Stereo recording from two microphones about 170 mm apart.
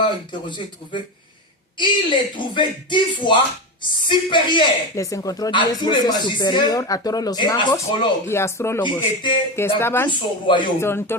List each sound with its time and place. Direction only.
0.4 s a man's voice: 30° left (ahead or behind)
8.3 s speech: 15° left (ahead or behind)
8.8 s a man's voice: 25° left (ahead or behind)
9.6 s speech: 15° left (ahead or behind)
10.1 s a man's voice: 30° left (ahead or behind)
10.8 s speech: 15° left (ahead or behind)